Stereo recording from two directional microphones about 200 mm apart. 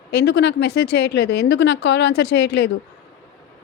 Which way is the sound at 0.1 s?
55° left (ahead or behind).